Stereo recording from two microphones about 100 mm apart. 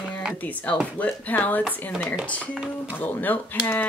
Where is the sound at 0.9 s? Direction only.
15° left (ahead or behind).